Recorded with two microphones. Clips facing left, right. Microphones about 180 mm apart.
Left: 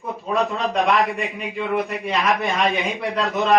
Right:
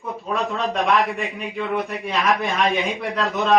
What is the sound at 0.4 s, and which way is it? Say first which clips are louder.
A man's voice: right 1 dB; centre (ahead or behind).